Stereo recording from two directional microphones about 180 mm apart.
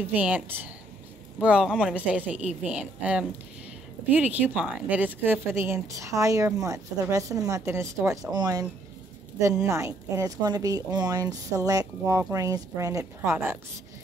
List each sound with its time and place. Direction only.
0.0 s speech: 10° right (ahead or behind)
1.4 s speech: 5° right (ahead or behind)
9.7 s speech: 15° right (ahead or behind)